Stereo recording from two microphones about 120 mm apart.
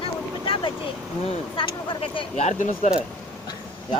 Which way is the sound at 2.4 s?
80° left.